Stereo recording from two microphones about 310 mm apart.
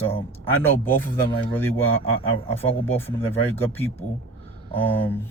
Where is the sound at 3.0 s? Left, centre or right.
Centre.